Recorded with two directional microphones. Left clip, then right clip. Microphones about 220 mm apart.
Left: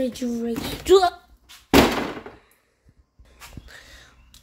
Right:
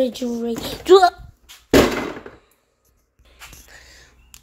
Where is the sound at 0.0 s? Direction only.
20° right (ahead or behind).